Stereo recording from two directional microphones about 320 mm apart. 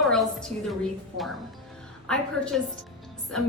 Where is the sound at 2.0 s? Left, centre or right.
Centre.